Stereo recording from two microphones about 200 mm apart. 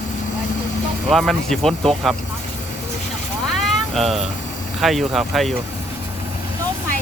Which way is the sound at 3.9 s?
Centre (ahead or behind).